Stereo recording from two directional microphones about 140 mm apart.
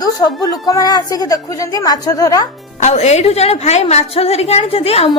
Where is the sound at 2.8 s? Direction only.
55° left (ahead or behind).